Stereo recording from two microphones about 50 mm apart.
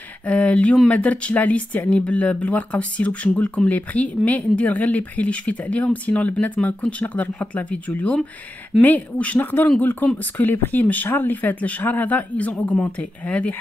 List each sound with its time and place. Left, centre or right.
0.3 s speech: left
8.8 s speech: left
9.4 s speech: left